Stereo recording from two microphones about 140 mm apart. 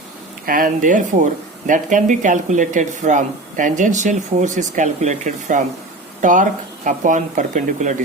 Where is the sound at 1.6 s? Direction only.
65° right (ahead or behind).